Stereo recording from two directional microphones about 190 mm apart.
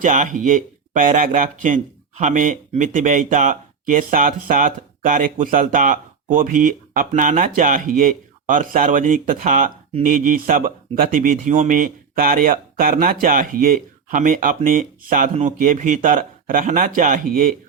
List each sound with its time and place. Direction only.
0.0 s speech: 45° right (ahead or behind)